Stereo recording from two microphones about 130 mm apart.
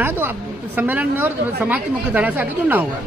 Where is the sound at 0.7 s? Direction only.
15° right (ahead or behind).